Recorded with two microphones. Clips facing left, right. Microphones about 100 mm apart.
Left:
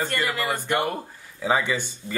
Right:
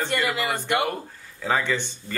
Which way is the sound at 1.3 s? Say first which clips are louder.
Left 1 dB; 10° left (ahead or behind).